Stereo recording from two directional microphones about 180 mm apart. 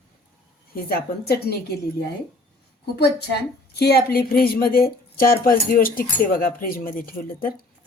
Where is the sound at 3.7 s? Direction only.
65° left (ahead or behind).